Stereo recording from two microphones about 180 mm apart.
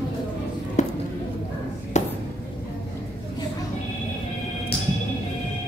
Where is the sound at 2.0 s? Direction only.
40° left (ahead or behind).